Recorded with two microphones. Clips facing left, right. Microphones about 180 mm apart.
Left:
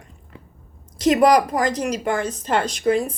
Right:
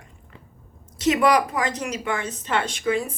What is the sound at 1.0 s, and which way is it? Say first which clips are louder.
A woman's voice: left 4 dB; 40° left (ahead or behind).